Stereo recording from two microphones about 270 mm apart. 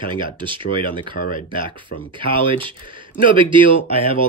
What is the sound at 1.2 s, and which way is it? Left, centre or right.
Speech, left.